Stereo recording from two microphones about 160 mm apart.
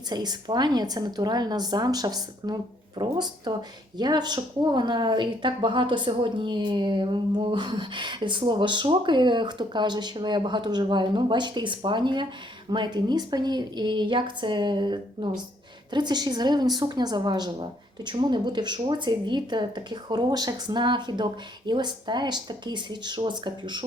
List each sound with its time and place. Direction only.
0.1 s speech: 25° right (ahead or behind)